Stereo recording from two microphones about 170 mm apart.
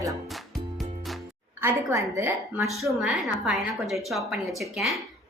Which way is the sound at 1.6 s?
20° right (ahead or behind).